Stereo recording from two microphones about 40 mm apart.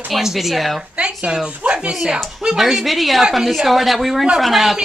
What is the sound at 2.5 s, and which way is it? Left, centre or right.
A woman's voice, centre.